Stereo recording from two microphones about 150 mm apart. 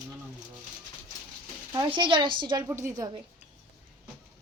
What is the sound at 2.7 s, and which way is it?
Speech, 20° right (ahead or behind).